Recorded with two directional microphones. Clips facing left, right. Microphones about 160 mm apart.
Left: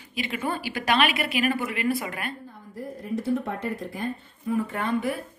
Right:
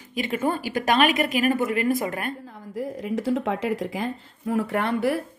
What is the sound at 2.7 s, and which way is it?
Speech, 90° right.